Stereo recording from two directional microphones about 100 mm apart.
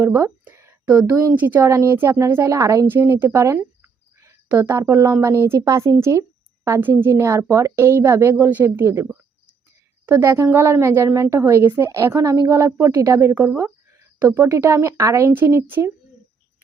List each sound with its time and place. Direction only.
0.0 s a woman's voice: 25° right (ahead or behind)
1.4 s a woman's voice: 20° right (ahead or behind)
4.4 s a woman's voice: 20° right (ahead or behind)